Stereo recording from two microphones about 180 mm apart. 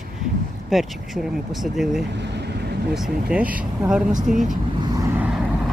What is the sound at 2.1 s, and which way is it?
Speech, 70° right (ahead or behind).